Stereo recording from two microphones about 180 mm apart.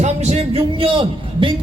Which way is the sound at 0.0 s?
40° right (ahead or behind).